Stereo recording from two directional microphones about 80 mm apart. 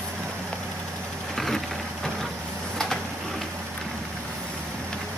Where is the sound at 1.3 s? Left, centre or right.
Centre.